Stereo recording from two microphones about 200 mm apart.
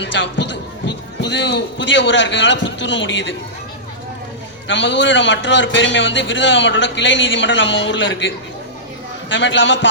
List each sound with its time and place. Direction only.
0.0 s a man's voice: 60° left (ahead or behind)
4.7 s a man's voice: 65° left (ahead or behind)
9.3 s a man's voice: 65° left (ahead or behind)